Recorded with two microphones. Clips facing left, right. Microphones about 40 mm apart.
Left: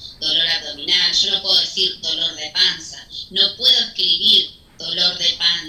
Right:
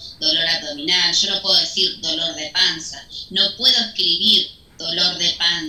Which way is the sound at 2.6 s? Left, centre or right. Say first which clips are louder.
Left 1 dB; centre.